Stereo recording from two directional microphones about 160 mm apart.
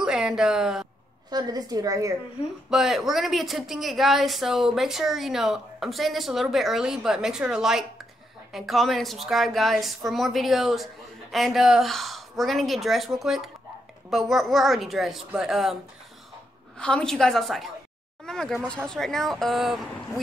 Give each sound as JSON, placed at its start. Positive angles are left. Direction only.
{"t": 0.0, "sound": "speech", "side_deg": -5}
{"t": 1.3, "sound": "a woman's voice", "side_deg": -25}
{"t": 2.7, "sound": "a woman's voice", "side_deg": 0}
{"t": 18.2, "sound": "a sound", "side_deg": 5}
{"t": 18.8, "sound": "a woman's voice", "side_deg": 5}